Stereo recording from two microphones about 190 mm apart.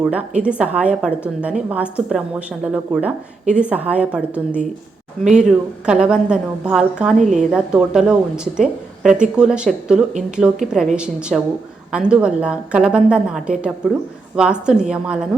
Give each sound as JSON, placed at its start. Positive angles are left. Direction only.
{"t": 0.0, "sound": "a woman's voice", "side_deg": -5}
{"t": 7.2, "sound": "a woman's voice", "side_deg": -40}
{"t": 7.5, "sound": "a woman's voice", "side_deg": -5}